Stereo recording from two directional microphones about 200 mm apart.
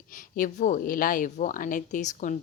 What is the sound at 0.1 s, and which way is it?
A woman's voice, 40° left (ahead or behind).